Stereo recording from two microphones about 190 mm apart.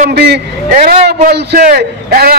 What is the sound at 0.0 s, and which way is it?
A man's voice, 60° right (ahead or behind).